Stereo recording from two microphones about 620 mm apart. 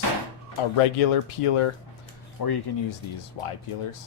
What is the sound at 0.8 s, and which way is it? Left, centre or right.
Speech, left.